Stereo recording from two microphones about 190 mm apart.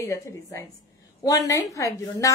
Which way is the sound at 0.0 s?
15° left (ahead or behind).